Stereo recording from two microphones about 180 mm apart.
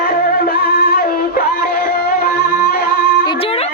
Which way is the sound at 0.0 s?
55° left (ahead or behind).